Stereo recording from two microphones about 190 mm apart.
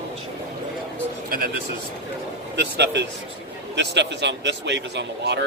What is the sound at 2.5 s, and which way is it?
Speech, 65° right (ahead or behind).